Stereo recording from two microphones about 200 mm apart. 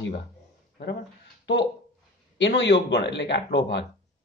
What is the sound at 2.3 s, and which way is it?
Speech, 65° left (ahead or behind).